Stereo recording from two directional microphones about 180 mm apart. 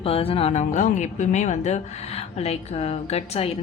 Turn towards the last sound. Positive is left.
turn(degrees=35)  # may be behind; listen again after turning